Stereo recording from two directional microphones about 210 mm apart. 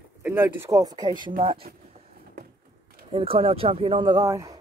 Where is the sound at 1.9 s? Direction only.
45° right (ahead or behind).